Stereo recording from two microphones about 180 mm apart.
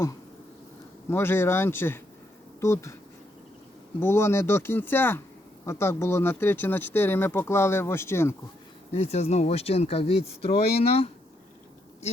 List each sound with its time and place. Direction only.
1.1 s speech: 15° left (ahead or behind)
4.0 s speech: 15° left (ahead or behind)
8.9 s speech: 35° left (ahead or behind)